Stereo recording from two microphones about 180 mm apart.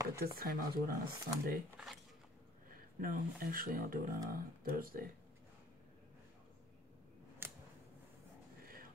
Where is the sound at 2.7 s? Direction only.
50° right (ahead or behind).